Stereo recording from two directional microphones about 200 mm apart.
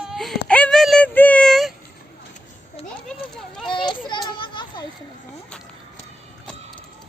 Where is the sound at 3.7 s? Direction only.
25° left (ahead or behind).